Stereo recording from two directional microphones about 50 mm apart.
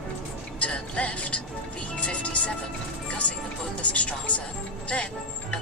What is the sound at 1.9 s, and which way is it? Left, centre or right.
Speech, left.